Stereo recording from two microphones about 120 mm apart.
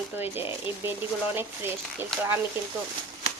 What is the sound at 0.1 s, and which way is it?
Speech, 20° right (ahead or behind).